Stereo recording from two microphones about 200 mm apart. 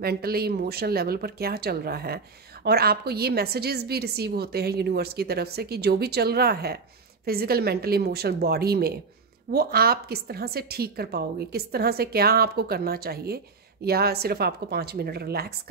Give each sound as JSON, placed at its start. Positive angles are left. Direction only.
{"t": 0.0, "sound": "speech", "side_deg": -50}